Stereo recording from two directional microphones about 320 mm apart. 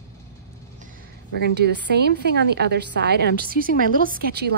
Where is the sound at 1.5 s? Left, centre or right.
Right.